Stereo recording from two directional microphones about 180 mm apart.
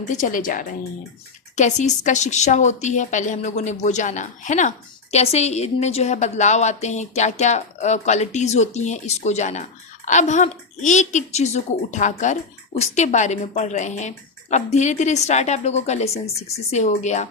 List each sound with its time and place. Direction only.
0.0 s a woman's voice: 45° left (ahead or behind)